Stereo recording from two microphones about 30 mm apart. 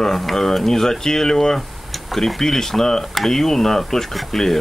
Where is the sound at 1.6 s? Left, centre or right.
Centre.